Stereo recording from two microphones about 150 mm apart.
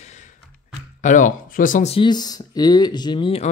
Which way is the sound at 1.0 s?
60° left (ahead or behind).